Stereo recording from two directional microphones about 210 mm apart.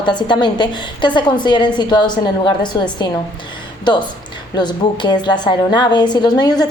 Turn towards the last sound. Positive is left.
turn(degrees=20)  # may be behind; listen again after turning